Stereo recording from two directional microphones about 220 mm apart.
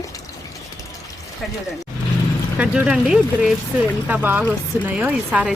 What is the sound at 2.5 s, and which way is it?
Speech, 5° right (ahead or behind).